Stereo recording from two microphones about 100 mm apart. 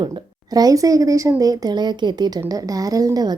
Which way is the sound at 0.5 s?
35° right (ahead or behind).